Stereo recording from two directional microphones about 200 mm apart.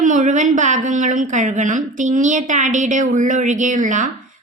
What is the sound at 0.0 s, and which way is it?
A woman's voice, 40° right (ahead or behind).